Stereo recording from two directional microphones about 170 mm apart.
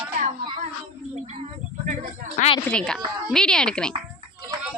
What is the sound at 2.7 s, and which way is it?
Speech, 5° left (ahead or behind).